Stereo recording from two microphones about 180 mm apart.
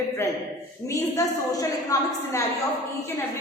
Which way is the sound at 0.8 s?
20° left (ahead or behind).